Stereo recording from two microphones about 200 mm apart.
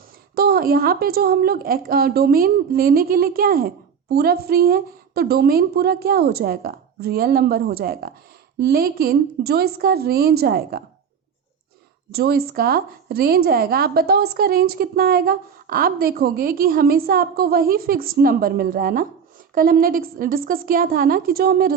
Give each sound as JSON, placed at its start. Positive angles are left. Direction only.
{"t": 0.3, "sound": "a woman's voice", "side_deg": -50}
{"t": 12.1, "sound": "a woman's voice", "side_deg": -50}